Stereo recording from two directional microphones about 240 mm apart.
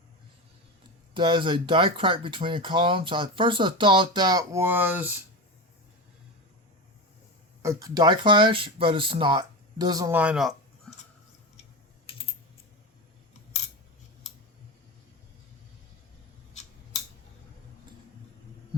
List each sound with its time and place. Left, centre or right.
1.1 s speech: right
7.6 s speech: centre